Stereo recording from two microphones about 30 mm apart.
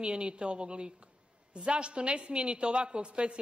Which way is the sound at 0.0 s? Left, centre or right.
Right.